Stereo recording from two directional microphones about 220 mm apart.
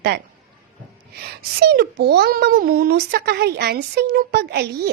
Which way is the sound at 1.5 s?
45° right (ahead or behind).